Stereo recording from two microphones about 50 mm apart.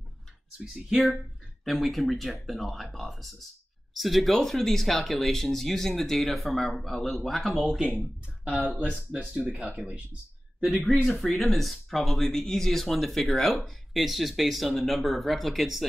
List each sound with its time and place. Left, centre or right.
1.0 s speech: centre
8.5 s speech: right
10.6 s speech: centre